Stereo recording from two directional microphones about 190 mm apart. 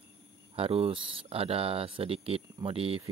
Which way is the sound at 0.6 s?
30° right (ahead or behind).